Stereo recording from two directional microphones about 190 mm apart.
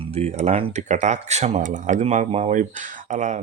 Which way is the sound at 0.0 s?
35° right (ahead or behind).